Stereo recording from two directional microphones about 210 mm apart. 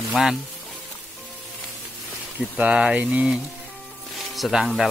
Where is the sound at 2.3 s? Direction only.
5° right (ahead or behind).